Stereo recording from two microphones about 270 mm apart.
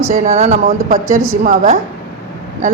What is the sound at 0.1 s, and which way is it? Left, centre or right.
Speech, right.